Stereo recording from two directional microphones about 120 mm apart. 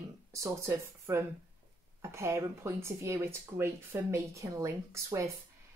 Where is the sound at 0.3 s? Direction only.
25° right (ahead or behind).